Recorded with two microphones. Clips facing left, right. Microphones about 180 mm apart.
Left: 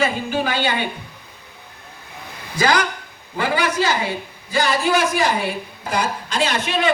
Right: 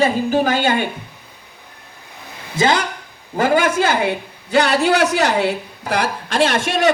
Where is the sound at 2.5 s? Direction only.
25° right (ahead or behind).